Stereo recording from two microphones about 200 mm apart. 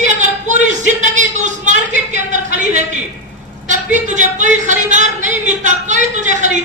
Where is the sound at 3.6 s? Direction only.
40° right (ahead or behind).